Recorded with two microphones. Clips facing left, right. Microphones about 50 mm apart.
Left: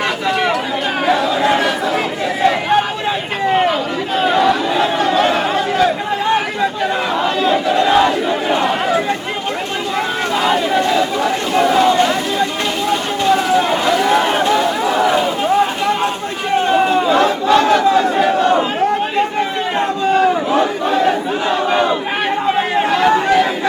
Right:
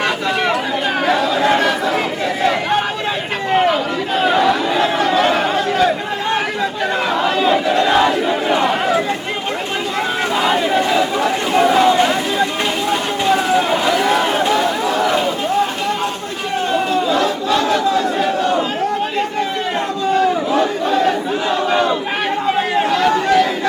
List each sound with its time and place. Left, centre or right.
0.0 s chatter: centre
7.1 s battle cry: centre
10.3 s chatter: centre
12.9 s a sound: centre
13.6 s run: centre
14.1 s a sound: centre
14.8 s run: centre
16.6 s crowd: left
20.1 s crowd: left
22.4 s chatter: centre